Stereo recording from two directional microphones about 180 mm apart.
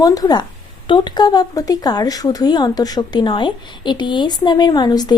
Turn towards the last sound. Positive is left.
turn(degrees=20)  # may be behind; listen again after turning